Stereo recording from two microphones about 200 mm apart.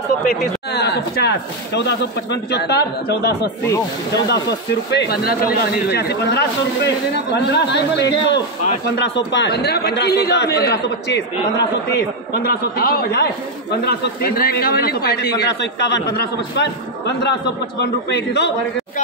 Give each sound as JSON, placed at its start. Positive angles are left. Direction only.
{"t": 0.7, "sound": "a man's voice", "side_deg": 55}